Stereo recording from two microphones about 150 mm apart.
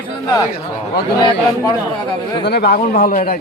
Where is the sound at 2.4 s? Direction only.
90° left; by 3.4 s 70° left (ahead or behind).